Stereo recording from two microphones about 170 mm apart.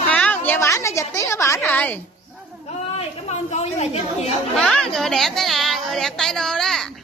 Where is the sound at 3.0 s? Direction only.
40° left (ahead or behind).